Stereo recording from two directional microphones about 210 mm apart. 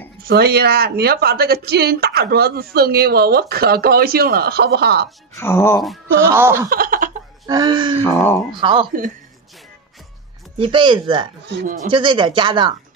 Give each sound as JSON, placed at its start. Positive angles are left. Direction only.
{"t": 0.2, "sound": "a woman's voice", "side_deg": -50}
{"t": 5.4, "sound": "speech", "side_deg": 10}
{"t": 6.1, "sound": "speech", "side_deg": -10}
{"t": 6.7, "sound": "a sound", "side_deg": -40}
{"t": 7.4, "sound": "speech", "side_deg": -20}
{"t": 8.0, "sound": "speech", "side_deg": 10}
{"t": 8.5, "sound": "speech", "side_deg": -25}
{"t": 10.6, "sound": "speech", "side_deg": -25}